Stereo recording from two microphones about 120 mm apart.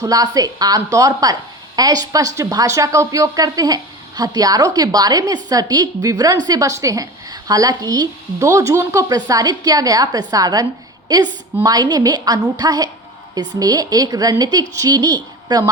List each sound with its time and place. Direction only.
0.0 s a woman's voice: 30° right (ahead or behind)